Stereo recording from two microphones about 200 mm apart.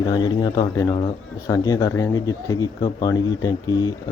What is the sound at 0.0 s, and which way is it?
Speech, 20° left (ahead or behind).